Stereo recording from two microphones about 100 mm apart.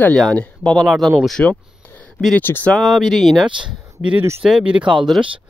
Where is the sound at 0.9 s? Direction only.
5° right (ahead or behind).